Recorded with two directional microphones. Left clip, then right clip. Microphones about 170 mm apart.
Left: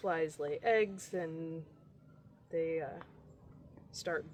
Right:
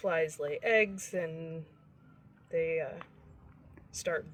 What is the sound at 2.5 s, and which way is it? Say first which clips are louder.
Speech: right 4 dB; 15° left (ahead or behind).